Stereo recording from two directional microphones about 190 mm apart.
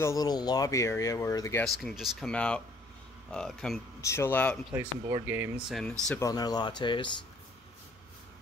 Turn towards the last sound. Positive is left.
turn(degrees=25)  # may be behind; listen again after turning